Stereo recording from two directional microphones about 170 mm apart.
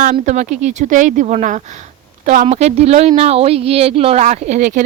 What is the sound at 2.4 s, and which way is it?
Speech, 40° right (ahead or behind).